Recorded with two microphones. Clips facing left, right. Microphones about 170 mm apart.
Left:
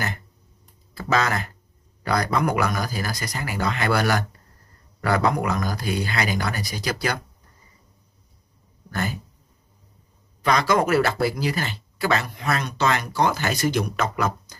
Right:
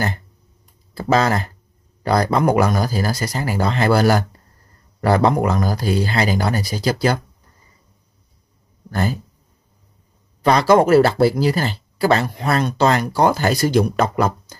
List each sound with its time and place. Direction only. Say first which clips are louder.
0.9 s speech: right 6 dB; 30° right (ahead or behind)
8.9 s speech: right 6 dB; 30° right (ahead or behind)
10.4 s speech: right 7 dB; 30° right (ahead or behind)